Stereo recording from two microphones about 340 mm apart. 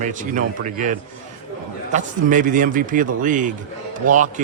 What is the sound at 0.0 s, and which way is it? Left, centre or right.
A man's voice, right.